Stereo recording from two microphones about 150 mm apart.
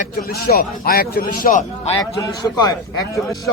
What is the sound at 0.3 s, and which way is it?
A man's voice, 90° left.